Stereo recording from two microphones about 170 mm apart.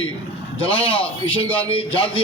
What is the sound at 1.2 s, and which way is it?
A man's voice, 30° left (ahead or behind).